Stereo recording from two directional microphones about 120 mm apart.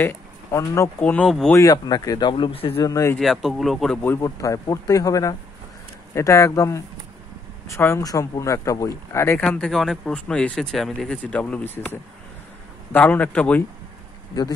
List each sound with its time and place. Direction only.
0.0 s speech: 25° left (ahead or behind)
1.0 s speech: 10° left (ahead or behind)
1.5 s speech: 30° left (ahead or behind); by 2.7 s 45° left (ahead or behind)
2.8 s speech: 25° left (ahead or behind)
3.2 s speech: centre (ahead or behind)
4.0 s speech: 20° left (ahead or behind)
9.5 s speech: 5° left (ahead or behind)